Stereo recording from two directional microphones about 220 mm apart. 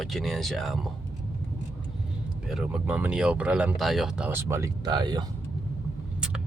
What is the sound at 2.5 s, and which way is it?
Speech, 5° right (ahead or behind).